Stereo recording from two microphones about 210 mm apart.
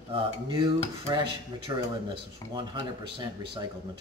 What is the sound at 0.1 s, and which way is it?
Speech, 25° right (ahead or behind).